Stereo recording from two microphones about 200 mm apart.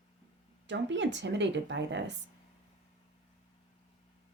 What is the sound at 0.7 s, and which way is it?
Speech, 65° right (ahead or behind).